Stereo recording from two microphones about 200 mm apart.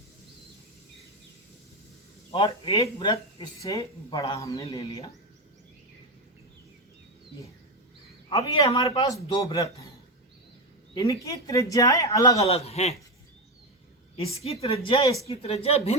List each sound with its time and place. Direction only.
2.3 s speech: 25° left (ahead or behind)
8.4 s speech: 15° left (ahead or behind)
10.9 s speech: 15° left (ahead or behind)
12.5 s speech: 30° left (ahead or behind)
14.4 s speech: 30° left (ahead or behind)